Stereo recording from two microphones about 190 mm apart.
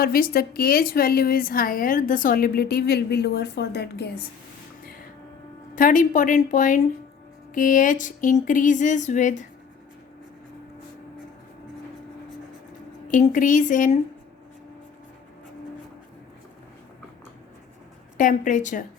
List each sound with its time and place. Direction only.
0.0 s a woman's voice: 50° left (ahead or behind)
5.7 s a woman's voice: 45° left (ahead or behind)
13.1 s a woman's voice: 45° left (ahead or behind)
18.2 s a woman's voice: 45° left (ahead or behind)